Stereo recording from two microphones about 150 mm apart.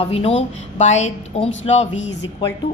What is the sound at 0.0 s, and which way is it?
Speech, 40° left (ahead or behind).